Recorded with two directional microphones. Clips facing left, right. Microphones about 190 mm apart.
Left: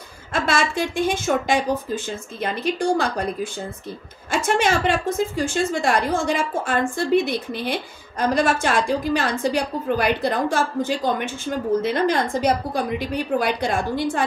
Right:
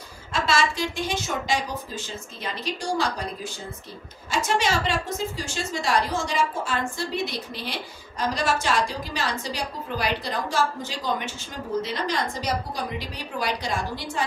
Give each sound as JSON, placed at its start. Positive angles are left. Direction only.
{"t": 0.3, "sound": "a woman's voice", "side_deg": 55}
{"t": 4.3, "sound": "a woman's voice", "side_deg": 55}